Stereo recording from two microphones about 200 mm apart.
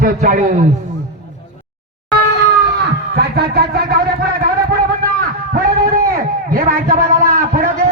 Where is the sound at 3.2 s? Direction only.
50° right (ahead or behind).